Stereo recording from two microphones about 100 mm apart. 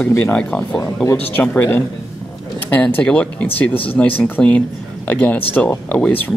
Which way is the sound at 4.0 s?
20° left (ahead or behind).